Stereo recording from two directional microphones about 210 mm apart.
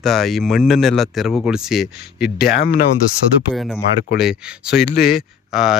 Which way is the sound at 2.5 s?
45° left (ahead or behind).